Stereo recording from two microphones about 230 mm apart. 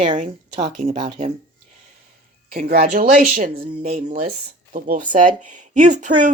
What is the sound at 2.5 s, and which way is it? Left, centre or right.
Speech, right.